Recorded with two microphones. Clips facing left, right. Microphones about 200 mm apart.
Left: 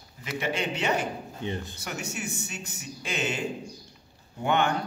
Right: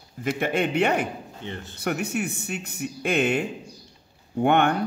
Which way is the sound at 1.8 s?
60° right (ahead or behind).